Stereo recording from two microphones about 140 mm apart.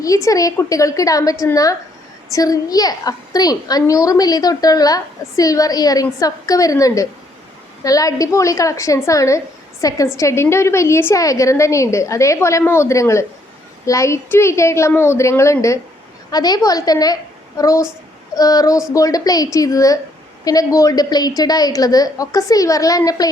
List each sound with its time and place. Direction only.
0.0 s a woman's voice: 25° left (ahead or behind)